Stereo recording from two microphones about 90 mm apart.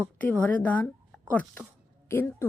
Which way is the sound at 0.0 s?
15° left (ahead or behind).